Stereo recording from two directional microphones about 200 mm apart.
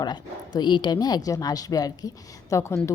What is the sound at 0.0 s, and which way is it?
Speech, 20° left (ahead or behind).